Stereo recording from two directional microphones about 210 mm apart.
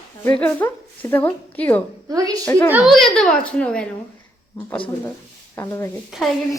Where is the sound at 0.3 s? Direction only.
10° left (ahead or behind).